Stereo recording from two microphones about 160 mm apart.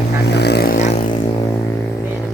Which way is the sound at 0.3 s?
90° left.